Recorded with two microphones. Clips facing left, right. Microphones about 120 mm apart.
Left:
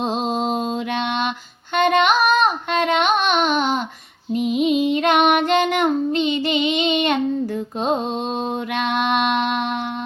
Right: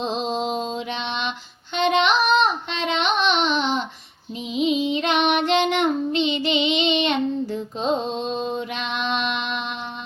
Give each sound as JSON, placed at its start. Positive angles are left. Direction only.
{"t": 0.0, "sound": "mantra", "side_deg": 50}
{"t": 1.7, "sound": "child singing", "side_deg": 50}